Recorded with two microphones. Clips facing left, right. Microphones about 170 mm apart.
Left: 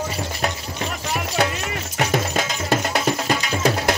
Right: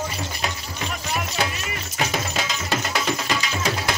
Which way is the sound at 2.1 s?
50° left (ahead or behind).